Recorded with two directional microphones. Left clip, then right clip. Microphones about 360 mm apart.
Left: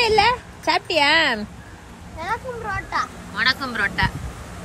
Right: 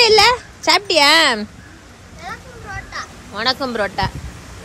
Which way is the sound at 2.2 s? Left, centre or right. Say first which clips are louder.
Left 5 dB; centre.